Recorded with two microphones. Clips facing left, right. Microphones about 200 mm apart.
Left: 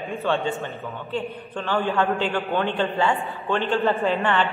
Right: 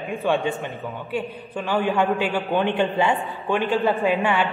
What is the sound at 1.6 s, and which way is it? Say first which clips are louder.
A man's voice: right 2 dB; 15° right (ahead or behind).